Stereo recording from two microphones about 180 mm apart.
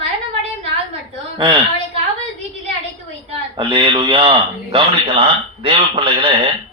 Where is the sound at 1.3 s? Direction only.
30° right (ahead or behind).